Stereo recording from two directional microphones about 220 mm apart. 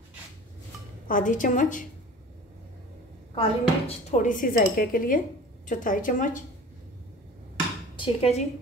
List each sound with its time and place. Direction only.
1.0 s speech: 35° left (ahead or behind)
3.3 s speech: 30° left (ahead or behind)
7.9 s speech: 25° left (ahead or behind)